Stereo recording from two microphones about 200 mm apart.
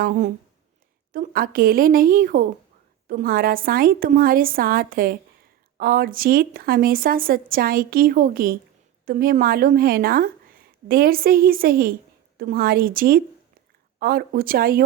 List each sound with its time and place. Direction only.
0.0 s speech: 40° right (ahead or behind)